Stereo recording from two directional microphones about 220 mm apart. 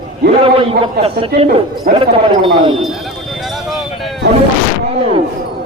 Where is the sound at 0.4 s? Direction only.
25° right (ahead or behind).